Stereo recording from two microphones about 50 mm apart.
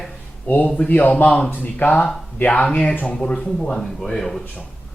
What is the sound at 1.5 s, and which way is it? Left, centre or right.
Speech, left.